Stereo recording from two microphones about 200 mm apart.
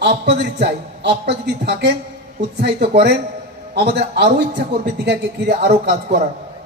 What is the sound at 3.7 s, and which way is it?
A man's voice, 55° right (ahead or behind).